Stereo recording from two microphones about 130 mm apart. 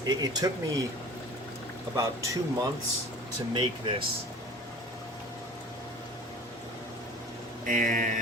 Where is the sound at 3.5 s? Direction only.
40° right (ahead or behind).